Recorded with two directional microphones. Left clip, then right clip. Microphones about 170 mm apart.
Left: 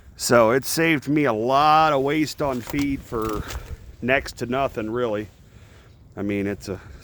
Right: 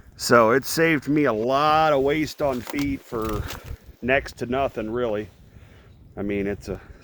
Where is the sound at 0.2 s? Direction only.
25° left (ahead or behind).